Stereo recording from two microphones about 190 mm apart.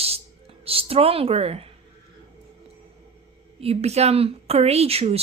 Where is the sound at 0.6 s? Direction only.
30° right (ahead or behind).